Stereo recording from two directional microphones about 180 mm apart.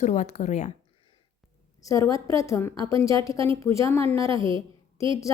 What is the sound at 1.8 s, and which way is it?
A woman's voice, 20° left (ahead or behind).